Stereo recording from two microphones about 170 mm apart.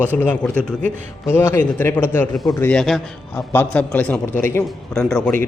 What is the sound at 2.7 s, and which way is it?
A man's voice, centre (ahead or behind).